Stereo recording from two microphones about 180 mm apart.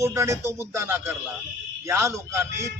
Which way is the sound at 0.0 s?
15° right (ahead or behind).